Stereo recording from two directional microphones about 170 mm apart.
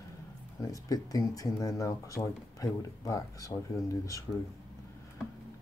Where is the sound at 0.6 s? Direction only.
20° left (ahead or behind).